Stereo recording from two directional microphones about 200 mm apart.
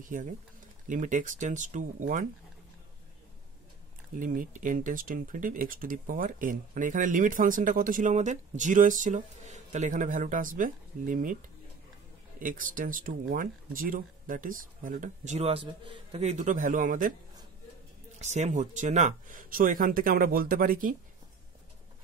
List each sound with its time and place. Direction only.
0.0 s speech: 40° right (ahead or behind)
4.2 s speech: 40° right (ahead or behind)
12.4 s speech: 40° right (ahead or behind)
18.2 s speech: 35° right (ahead or behind)